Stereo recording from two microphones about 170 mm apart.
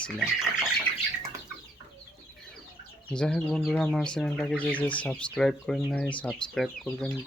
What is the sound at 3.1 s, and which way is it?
Speech, 5° left (ahead or behind).